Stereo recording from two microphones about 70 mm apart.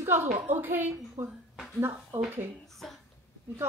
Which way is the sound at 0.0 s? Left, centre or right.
Right.